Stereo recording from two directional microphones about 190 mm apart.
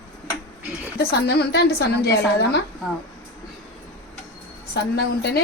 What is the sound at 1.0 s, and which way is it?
A woman's voice, 60° left (ahead or behind).